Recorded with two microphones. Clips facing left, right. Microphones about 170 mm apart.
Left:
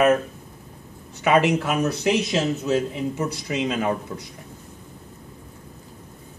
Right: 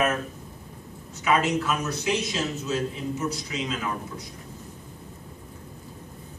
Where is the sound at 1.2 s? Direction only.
60° left (ahead or behind).